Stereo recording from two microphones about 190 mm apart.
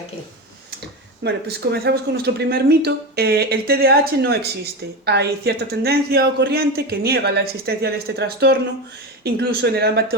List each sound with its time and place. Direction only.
1.2 s speech: 60° right (ahead or behind)